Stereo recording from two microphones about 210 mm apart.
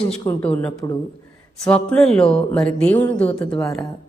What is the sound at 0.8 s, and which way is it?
Speech, 15° left (ahead or behind).